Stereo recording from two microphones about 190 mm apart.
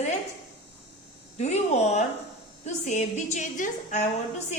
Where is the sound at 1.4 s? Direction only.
35° left (ahead or behind).